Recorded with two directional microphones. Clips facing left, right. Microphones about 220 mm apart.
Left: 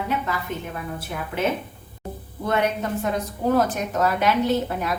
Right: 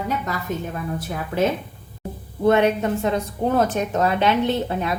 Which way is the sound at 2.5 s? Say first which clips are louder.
Right 6 dB; 25° right (ahead or behind).